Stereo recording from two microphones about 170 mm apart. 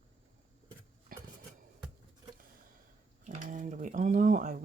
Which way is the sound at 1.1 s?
60° right (ahead or behind).